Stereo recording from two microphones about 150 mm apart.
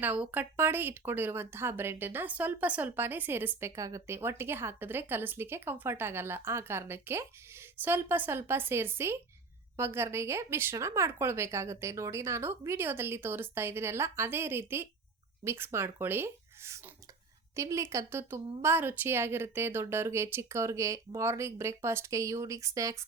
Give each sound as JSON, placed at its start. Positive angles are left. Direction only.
{"t": 0.0, "sound": "a woman's voice", "side_deg": -10}